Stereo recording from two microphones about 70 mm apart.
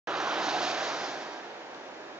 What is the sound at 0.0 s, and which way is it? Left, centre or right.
Waves, centre.